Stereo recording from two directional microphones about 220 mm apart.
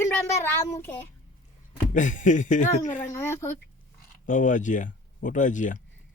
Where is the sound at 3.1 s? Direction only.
10° left (ahead or behind).